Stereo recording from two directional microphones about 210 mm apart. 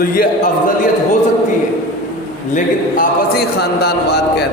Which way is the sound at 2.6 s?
45° left (ahead or behind).